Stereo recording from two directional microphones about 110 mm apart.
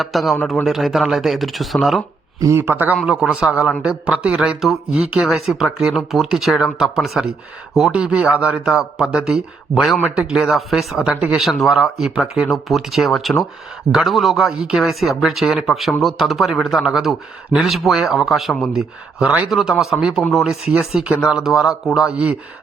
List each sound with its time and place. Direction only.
0.0 s speech: centre (ahead or behind)
2.4 s a man's voice: 25° right (ahead or behind)